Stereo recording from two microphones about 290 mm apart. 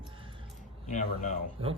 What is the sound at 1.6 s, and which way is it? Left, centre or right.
Speech, centre.